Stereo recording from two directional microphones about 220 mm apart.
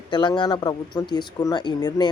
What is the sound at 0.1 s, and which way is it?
Speech, 20° left (ahead or behind).